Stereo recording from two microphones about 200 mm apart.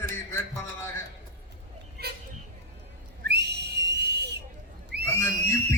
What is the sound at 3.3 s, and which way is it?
Whistle, 55° right (ahead or behind).